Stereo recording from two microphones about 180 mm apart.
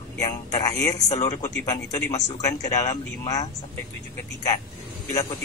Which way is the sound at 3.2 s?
20° left (ahead or behind).